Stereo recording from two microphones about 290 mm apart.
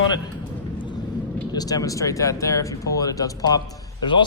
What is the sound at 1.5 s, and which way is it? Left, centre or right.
Speech, centre.